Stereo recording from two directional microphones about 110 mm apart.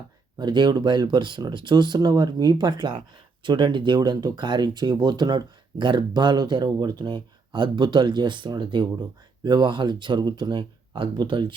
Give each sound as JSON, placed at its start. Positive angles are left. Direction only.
{"t": 0.3, "sound": "speech", "side_deg": -45}